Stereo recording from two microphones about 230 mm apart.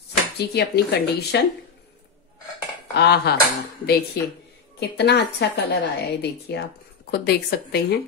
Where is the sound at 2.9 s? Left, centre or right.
Left.